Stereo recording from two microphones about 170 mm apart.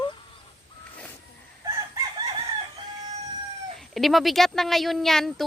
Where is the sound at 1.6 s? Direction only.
25° right (ahead or behind).